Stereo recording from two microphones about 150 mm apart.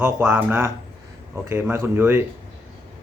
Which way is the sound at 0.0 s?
15° right (ahead or behind).